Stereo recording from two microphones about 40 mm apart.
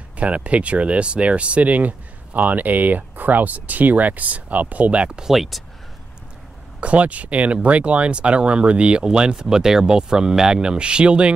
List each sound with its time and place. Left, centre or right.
0.1 s speech: right
5.3 s speech: centre
6.8 s speech: right